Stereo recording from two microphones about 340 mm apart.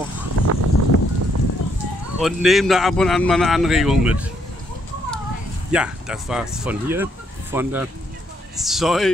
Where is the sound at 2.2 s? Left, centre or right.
Centre.